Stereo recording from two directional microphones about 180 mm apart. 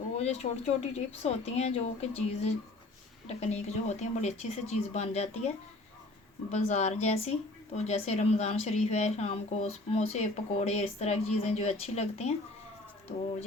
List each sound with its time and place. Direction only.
0.2 s speech: 35° left (ahead or behind)
6.5 s speech: 40° left (ahead or behind)